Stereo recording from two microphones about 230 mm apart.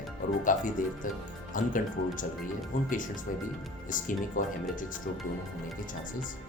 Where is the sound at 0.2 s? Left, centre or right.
Left.